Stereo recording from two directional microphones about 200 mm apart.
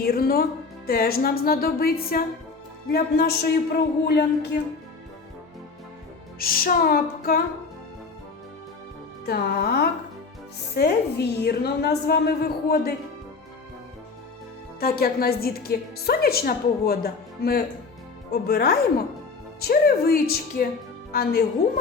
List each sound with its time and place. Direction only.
0.0 s a woman's voice: 50° left (ahead or behind)
6.4 s a woman's voice: 45° left (ahead or behind)
9.2 s a woman's voice: 50° left (ahead or behind)
14.8 s a woman's voice: 50° left (ahead or behind)